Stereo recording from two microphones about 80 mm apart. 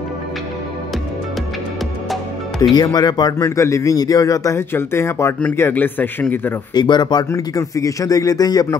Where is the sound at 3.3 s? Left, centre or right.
Left.